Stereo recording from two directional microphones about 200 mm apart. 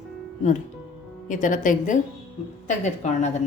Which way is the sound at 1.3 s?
40° left (ahead or behind).